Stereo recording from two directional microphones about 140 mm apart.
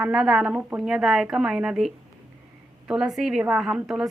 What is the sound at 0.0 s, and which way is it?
A woman's voice, 5° right (ahead or behind).